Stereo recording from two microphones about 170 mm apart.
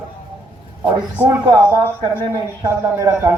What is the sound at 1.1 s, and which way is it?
A man's voice, 15° right (ahead or behind).